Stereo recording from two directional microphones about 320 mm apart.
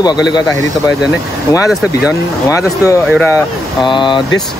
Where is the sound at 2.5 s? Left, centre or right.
Centre.